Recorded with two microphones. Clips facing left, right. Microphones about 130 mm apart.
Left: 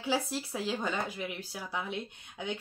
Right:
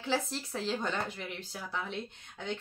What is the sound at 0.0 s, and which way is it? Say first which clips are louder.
Speech: left 1 dB; 10° left (ahead or behind).